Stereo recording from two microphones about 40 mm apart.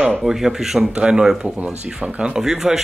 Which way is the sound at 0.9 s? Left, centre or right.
Right.